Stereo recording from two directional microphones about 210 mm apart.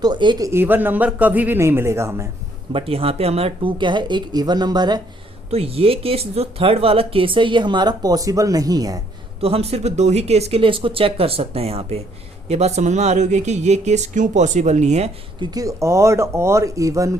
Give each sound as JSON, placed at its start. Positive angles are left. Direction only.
{"t": 0.0, "sound": "speech", "side_deg": -20}
{"t": 2.7, "sound": "speech", "side_deg": -25}
{"t": 9.4, "sound": "speech", "side_deg": -30}